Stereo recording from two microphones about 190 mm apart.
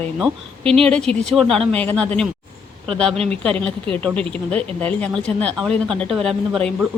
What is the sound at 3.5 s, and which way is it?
Speech, 30° right (ahead or behind).